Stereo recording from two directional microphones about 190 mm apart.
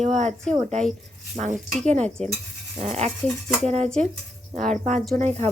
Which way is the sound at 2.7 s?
35° right (ahead or behind).